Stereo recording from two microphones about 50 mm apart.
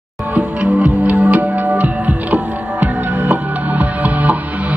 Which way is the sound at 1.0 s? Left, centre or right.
Right.